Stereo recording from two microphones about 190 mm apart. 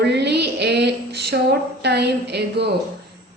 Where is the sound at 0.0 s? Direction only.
65° right (ahead or behind).